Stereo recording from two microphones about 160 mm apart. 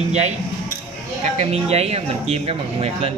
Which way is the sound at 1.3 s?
40° right (ahead or behind).